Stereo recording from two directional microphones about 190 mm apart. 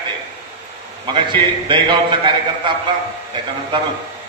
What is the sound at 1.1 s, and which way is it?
Speech, 25° right (ahead or behind).